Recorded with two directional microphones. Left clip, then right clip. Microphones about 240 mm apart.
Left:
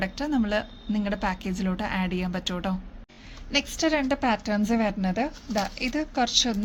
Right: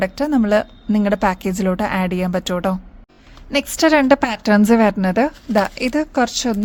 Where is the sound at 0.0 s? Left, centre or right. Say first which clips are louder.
Right 9 dB; right.